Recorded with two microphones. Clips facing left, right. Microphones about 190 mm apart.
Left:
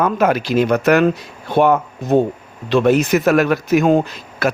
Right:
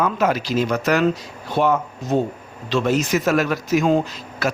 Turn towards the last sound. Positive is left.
turn(degrees=60)  # may be behind; listen again after turning